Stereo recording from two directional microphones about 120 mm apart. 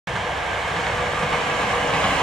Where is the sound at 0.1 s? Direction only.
Centre (ahead or behind).